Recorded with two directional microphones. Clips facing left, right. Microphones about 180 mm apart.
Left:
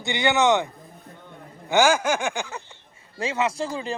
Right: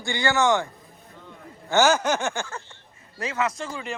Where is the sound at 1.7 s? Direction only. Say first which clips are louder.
Even; 10° left (ahead or behind).